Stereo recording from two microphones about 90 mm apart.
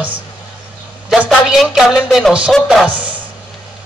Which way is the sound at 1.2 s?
5° right (ahead or behind).